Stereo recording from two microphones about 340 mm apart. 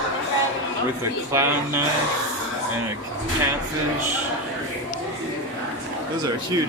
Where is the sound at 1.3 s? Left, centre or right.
Centre.